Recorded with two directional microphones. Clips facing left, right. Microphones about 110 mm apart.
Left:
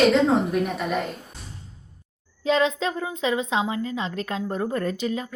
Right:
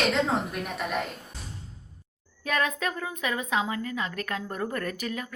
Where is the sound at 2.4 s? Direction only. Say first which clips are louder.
Left 6 dB; 20° left (ahead or behind).